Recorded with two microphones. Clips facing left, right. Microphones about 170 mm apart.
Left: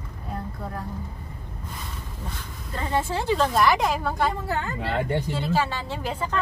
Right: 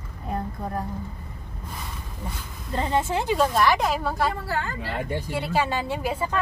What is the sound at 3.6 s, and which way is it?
Speech, centre (ahead or behind).